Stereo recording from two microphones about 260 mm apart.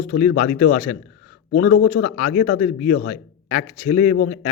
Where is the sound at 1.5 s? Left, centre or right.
Left.